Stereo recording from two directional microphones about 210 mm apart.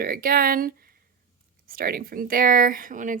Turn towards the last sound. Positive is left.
turn(degrees=-40)  # may be behind; listen again after turning